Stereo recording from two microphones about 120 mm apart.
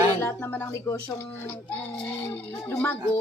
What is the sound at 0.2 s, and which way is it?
Speech, 20° left (ahead or behind).